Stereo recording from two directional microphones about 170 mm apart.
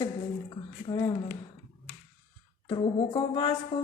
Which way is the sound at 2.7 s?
30° left (ahead or behind).